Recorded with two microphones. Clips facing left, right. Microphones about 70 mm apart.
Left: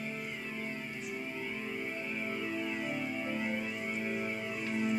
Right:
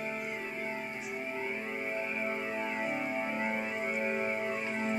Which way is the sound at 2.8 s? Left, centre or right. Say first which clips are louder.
Right 2 dB; right.